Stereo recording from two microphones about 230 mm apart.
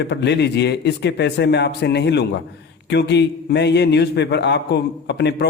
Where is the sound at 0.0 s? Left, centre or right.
Left.